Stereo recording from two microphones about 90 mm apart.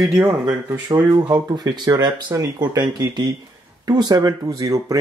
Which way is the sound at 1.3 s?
55° right (ahead or behind).